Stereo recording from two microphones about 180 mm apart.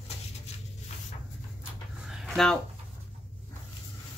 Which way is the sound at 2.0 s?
Centre (ahead or behind).